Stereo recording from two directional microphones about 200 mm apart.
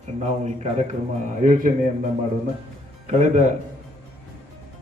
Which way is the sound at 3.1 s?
35° right (ahead or behind).